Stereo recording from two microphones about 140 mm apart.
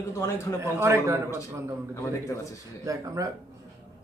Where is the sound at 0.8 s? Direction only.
20° right (ahead or behind).